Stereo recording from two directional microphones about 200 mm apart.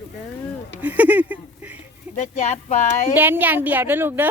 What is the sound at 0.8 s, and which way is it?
Speech, 10° right (ahead or behind).